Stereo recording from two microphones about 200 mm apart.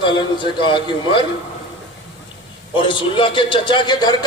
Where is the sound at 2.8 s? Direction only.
25° left (ahead or behind).